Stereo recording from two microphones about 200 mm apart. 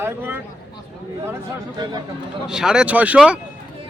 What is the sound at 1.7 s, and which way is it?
Speech, 20° right (ahead or behind).